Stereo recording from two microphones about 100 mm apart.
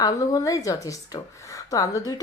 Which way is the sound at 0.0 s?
35° left (ahead or behind).